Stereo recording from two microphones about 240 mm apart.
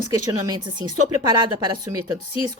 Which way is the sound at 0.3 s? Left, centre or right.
Centre.